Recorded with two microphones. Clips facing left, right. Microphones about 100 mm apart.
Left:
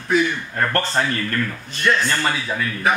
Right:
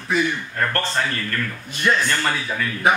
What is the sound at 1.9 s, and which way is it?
Speech, 10° right (ahead or behind).